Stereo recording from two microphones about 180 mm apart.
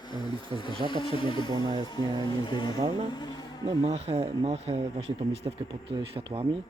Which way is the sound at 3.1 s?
25° left (ahead or behind).